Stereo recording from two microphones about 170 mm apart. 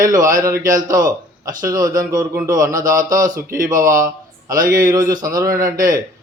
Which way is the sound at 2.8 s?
50° right (ahead or behind).